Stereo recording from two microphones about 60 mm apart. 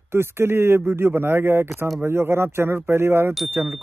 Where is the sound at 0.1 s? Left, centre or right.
Right.